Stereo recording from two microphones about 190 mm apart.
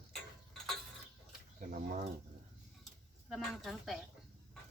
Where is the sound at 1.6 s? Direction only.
45° right (ahead or behind).